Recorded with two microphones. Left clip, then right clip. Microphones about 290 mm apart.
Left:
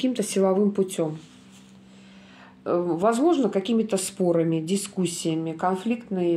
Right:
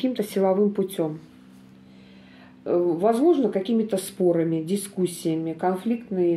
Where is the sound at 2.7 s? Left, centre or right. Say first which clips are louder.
Right 1 dB; left.